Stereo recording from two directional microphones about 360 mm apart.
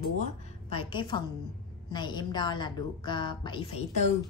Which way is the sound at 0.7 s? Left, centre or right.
Centre.